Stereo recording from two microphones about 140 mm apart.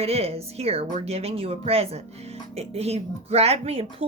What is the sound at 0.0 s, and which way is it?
Speech, 45° right (ahead or behind).